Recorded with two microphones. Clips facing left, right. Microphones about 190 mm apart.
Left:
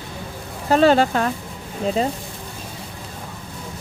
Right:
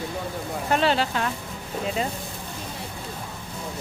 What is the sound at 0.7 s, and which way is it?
Speech, 40° left (ahead or behind).